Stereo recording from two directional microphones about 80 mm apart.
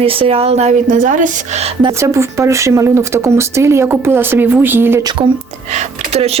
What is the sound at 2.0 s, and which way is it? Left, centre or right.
Speech, right.